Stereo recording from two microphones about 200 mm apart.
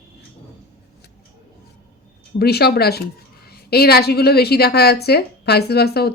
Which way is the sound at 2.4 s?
55° left (ahead or behind).